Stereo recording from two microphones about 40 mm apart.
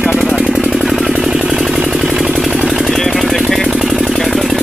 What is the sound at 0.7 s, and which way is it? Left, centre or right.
Vehicle, centre.